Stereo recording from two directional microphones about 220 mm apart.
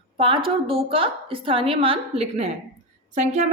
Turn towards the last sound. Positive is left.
turn(degrees=-30)  # may be behind; listen again after turning